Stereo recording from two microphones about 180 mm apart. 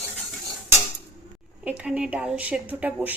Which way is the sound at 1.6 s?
5° right (ahead or behind).